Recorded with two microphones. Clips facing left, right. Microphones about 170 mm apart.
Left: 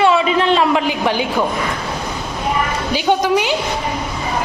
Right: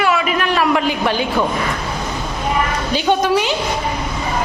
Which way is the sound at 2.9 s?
15° left (ahead or behind).